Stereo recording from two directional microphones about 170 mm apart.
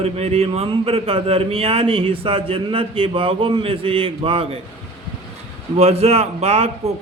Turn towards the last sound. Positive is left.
turn(degrees=-40)  # may be behind; listen again after turning